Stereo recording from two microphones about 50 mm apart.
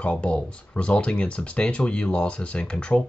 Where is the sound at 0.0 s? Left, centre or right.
Left.